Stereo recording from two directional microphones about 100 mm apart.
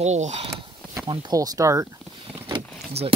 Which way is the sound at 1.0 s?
40° right (ahead or behind).